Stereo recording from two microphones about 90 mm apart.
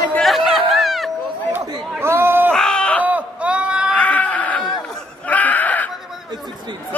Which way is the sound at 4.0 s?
15° left (ahead or behind).